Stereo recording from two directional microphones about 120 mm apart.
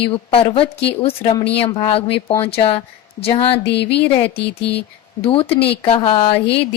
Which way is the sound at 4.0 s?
50° left (ahead or behind).